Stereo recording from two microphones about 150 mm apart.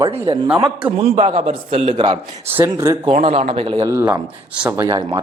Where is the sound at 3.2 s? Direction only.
45° right (ahead or behind).